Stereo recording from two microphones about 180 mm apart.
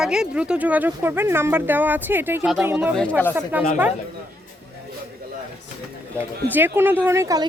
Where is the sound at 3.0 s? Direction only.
10° left (ahead or behind).